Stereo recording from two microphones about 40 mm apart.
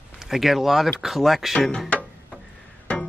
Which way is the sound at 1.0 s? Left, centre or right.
Centre.